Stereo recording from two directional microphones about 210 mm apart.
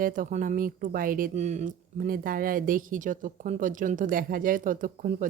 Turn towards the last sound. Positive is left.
turn(degrees=-40)  # may be behind; listen again after turning